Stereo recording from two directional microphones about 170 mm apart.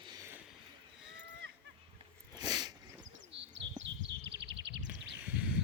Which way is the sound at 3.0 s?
90° right.